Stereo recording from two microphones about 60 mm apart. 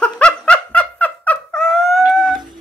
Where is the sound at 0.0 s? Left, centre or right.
Left.